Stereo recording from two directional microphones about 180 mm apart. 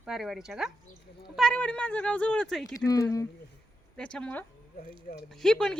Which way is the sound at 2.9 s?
20° left (ahead or behind).